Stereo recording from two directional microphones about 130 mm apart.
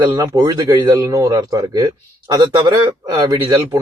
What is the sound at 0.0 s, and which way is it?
A man's voice, 30° right (ahead or behind).